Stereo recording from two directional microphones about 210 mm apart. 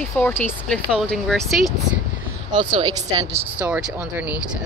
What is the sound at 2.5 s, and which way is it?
Speech, 25° right (ahead or behind).